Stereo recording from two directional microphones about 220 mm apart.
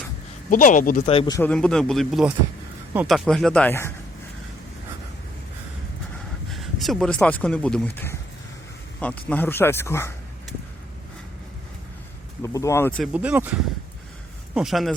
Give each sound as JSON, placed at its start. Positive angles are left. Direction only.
{"t": 0.5, "sound": "speech", "side_deg": 35}
{"t": 1.0, "sound": "speech", "side_deg": 20}
{"t": 1.4, "sound": "speech", "side_deg": 5}
{"t": 6.5, "sound": "speech", "side_deg": 0}
{"t": 12.4, "sound": "speech", "side_deg": 15}
{"t": 13.0, "sound": "speech", "side_deg": -5}